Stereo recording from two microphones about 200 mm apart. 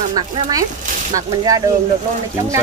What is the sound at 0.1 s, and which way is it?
Speech, 20° right (ahead or behind).